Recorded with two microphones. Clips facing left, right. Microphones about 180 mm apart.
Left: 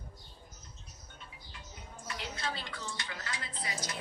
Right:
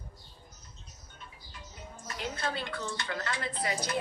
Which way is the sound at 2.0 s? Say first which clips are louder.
Right 4 dB; 50° right (ahead or behind).